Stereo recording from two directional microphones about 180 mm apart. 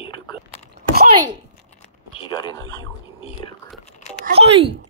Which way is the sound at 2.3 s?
25° left (ahead or behind).